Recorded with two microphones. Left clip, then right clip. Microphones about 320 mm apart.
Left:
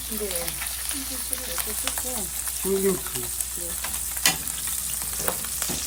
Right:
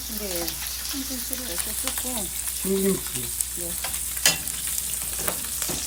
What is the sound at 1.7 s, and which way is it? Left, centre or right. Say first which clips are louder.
Frying: even; centre.